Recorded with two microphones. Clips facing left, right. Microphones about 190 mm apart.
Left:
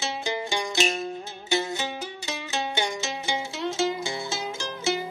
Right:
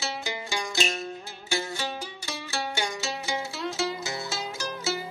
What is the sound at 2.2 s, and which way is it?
Mandolin, 20° left (ahead or behind).